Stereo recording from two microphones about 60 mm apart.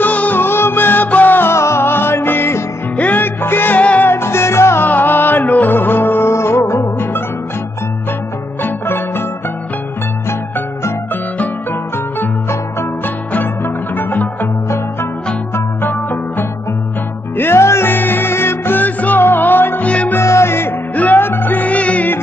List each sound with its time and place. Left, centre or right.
0.0 s music: left
0.4 s music: left
1.5 s music: left
3.0 s music: left
3.8 s music: left
4.1 s music: left
4.8 s music: left
8.6 s music: left
13.9 s music: left
15.5 s music: left
17.4 s music: left
20.2 s music: left
20.9 s music: left